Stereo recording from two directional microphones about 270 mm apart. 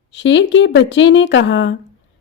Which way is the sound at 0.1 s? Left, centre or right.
Left.